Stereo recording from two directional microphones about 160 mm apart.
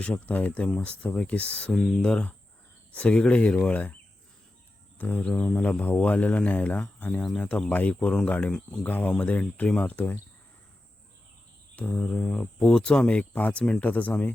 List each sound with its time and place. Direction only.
0.0 s speech: 10° left (ahead or behind)
4.9 s speech: 10° left (ahead or behind)
11.8 s speech: 5° left (ahead or behind)